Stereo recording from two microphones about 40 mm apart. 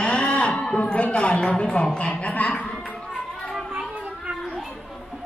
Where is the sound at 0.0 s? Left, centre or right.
Left.